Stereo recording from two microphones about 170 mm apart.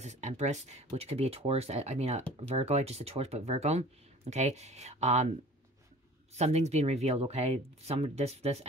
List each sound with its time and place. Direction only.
0.0 s speech: 45° right (ahead or behind)
6.3 s speech: 40° right (ahead or behind)